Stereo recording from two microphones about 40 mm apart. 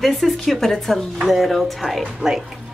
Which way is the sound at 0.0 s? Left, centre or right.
Centre.